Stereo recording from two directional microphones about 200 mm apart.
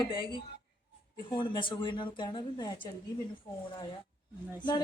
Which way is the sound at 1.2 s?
25° left (ahead or behind).